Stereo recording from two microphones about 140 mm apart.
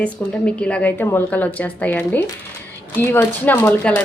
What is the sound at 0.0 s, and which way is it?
A woman's voice, 10° left (ahead or behind).